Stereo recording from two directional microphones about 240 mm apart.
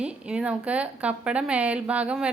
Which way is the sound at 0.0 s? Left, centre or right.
Centre.